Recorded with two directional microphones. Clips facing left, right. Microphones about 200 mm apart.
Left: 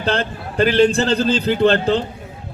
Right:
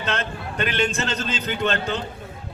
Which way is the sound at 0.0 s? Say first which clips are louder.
Left 6 dB; 35° left (ahead or behind).